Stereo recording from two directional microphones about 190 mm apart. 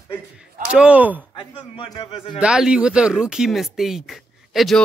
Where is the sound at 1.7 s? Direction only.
25° left (ahead or behind).